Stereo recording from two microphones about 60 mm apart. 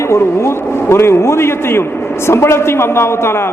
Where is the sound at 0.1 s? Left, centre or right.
Left.